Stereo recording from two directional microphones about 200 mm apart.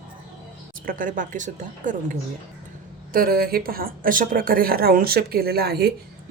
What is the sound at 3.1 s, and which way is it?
Speech, 45° right (ahead or behind).